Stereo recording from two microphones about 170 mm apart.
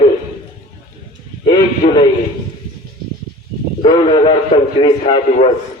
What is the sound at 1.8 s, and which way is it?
Speech, 35° left (ahead or behind).